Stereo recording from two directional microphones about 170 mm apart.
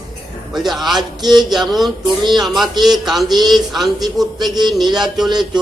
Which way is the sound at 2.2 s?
25° right (ahead or behind).